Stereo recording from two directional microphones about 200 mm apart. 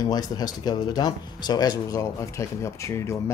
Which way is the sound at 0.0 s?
20° left (ahead or behind).